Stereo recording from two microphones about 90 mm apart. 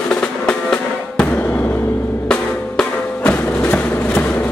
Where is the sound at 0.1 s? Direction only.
10° left (ahead or behind).